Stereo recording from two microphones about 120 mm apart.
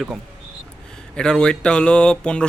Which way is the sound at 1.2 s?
5° left (ahead or behind).